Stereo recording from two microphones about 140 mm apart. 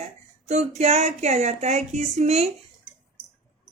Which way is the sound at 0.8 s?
50° right (ahead or behind).